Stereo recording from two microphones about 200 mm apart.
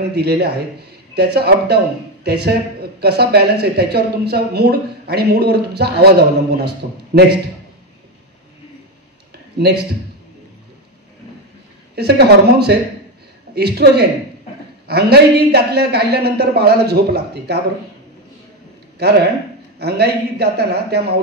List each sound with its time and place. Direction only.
0.1 s a man's voice: 55° right (ahead or behind)
9.6 s speech: 55° right (ahead or behind)
11.9 s speech: 55° right (ahead or behind)
19.0 s speech: 55° right (ahead or behind)